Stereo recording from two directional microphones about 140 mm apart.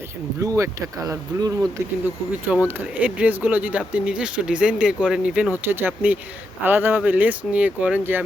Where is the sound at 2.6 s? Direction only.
10° right (ahead or behind).